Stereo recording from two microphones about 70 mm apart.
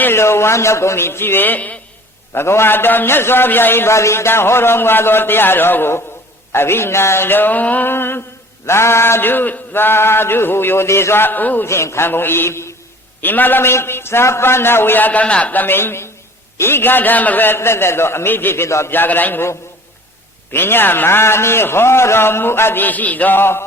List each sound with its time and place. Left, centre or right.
0.0 s a man's voice: left
2.3 s a man's voice: left
11.7 s a man's voice: left
13.2 s a man's voice: left
15.6 s a man's voice: left
18.9 s a man's voice: left